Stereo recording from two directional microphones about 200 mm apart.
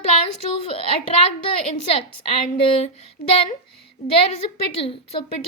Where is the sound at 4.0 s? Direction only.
35° left (ahead or behind).